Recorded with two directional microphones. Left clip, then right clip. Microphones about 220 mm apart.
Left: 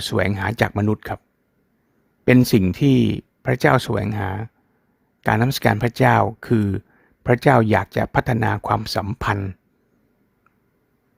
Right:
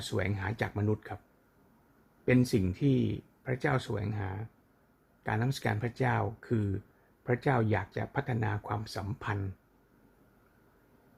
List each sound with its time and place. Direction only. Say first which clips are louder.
0.1 s speech: left 12 dB; 50° left (ahead or behind)
2.2 s speech: left 12 dB; 50° left (ahead or behind)